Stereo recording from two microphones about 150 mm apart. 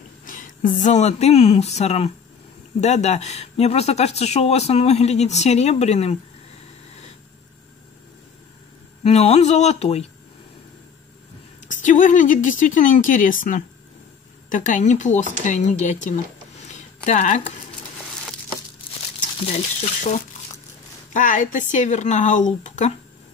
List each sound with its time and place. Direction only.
0.2 s speech: 60° left (ahead or behind); by 6.1 s 45° left (ahead or behind)
9.0 s speech: 45° left (ahead or behind)
11.6 s speech: 55° left (ahead or behind)
16.6 s a sound: 50° left (ahead or behind)
19.4 s speech: 45° left (ahead or behind)
21.1 s speech: 60° left (ahead or behind)